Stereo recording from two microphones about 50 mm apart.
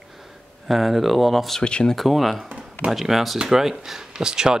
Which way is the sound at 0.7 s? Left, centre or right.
Centre.